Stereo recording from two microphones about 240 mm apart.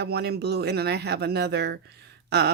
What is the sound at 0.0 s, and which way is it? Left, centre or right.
Speech, right.